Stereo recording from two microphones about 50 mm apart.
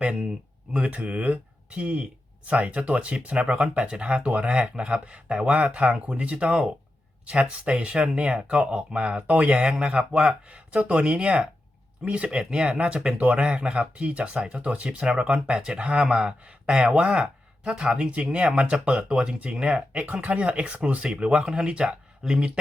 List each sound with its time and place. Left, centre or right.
0.0 s speech: right
18.0 s speech: right